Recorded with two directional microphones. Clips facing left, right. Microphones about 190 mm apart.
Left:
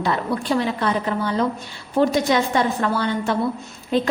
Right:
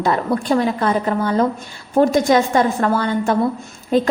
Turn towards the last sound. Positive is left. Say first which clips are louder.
# right 4 dB
turn(degrees=-45)  # may be behind; listen again after turning